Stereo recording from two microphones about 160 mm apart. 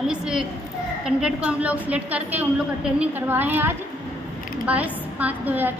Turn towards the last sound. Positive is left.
turn(degrees=-10)  # may be behind; listen again after turning